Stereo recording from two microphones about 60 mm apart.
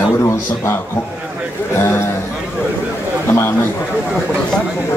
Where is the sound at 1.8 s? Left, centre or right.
Left.